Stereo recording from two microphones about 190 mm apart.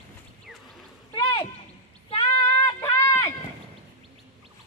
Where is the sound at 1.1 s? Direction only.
25° left (ahead or behind).